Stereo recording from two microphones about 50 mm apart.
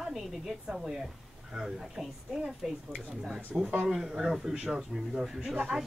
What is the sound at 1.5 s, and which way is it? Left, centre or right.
Speech, centre.